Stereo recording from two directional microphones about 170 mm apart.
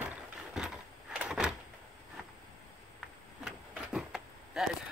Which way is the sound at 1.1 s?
5° right (ahead or behind).